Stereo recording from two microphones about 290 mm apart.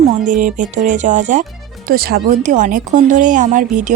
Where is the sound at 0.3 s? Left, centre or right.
Right.